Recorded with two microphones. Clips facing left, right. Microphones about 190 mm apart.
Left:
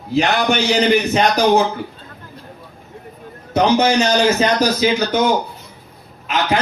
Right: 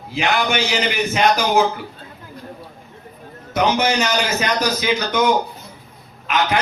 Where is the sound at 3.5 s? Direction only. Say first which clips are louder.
Left 4 dB; 30° left (ahead or behind).